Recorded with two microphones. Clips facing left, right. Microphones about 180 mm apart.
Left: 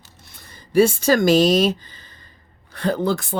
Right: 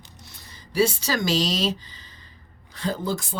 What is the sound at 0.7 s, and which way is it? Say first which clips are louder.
Speech: left 7 dB; 50° left (ahead or behind).